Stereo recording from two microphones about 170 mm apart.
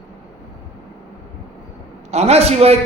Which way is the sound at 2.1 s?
40° right (ahead or behind).